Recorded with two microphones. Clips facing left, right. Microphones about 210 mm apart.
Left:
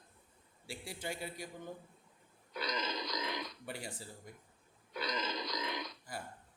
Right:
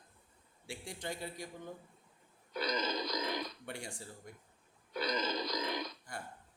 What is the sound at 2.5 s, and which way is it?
Burping, 40° right (ahead or behind).